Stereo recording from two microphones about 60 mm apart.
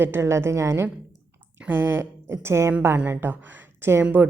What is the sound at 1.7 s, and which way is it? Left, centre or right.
A woman's voice, right.